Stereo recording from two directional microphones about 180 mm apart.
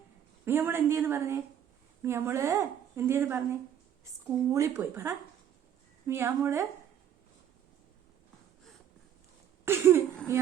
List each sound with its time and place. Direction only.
0.4 s a woman's voice: 15° right (ahead or behind)
9.6 s cough: 15° right (ahead or behind)
10.3 s a woman's voice: 15° right (ahead or behind)